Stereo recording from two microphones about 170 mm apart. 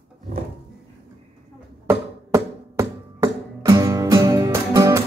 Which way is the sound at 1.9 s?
15° right (ahead or behind).